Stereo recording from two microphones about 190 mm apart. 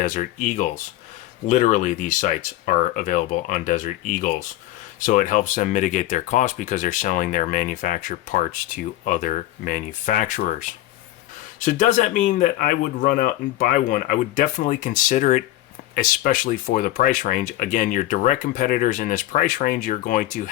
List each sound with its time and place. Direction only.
0.0 s speech: 45° left (ahead or behind)